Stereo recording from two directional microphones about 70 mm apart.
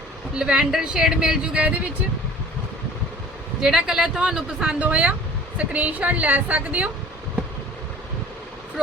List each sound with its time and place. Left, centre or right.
0.3 s speech: centre
3.6 s a woman's voice: centre